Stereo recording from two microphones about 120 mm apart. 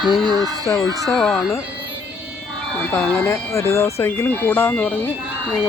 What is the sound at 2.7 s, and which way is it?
Speech, 10° left (ahead or behind).